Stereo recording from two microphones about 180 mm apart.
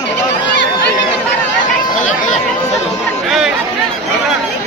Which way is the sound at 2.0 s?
40° left (ahead or behind).